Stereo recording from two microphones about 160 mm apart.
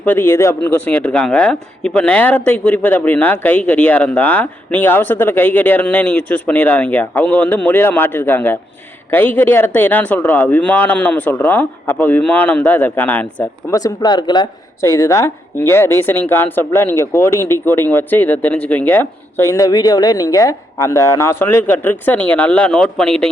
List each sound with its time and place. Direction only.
0.0 s speech: 10° left (ahead or behind)